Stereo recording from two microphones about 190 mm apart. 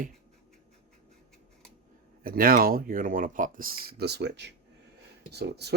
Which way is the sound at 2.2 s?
50° right (ahead or behind).